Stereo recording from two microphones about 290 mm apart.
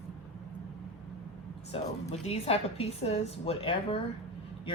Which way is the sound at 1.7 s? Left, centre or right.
Left.